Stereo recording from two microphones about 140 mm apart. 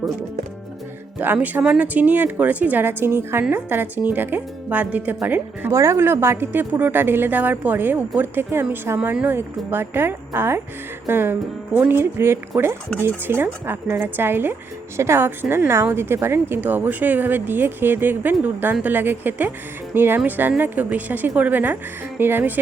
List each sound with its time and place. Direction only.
1.2 s speech: 15° right (ahead or behind)